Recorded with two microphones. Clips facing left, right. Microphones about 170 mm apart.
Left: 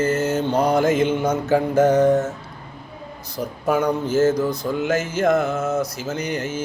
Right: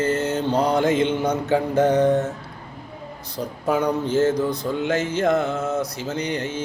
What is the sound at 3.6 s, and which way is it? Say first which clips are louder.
Mantra: left 1 dB; 30° right (ahead or behind).